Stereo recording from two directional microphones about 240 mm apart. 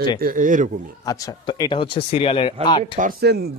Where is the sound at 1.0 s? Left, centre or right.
Centre.